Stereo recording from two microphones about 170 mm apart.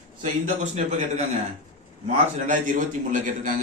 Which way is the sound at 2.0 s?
50° right (ahead or behind).